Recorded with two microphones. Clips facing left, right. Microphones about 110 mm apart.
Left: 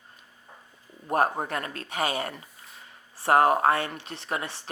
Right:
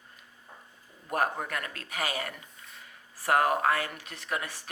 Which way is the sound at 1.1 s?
30° left (ahead or behind).